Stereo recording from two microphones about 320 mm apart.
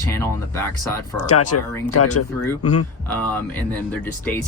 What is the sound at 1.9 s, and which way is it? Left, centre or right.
Speech, left.